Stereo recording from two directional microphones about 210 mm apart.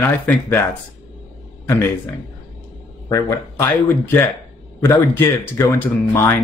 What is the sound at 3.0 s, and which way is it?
Speech, 15° left (ahead or behind).